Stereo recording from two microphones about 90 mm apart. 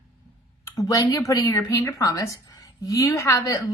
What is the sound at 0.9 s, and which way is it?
A woman's voice, 35° left (ahead or behind).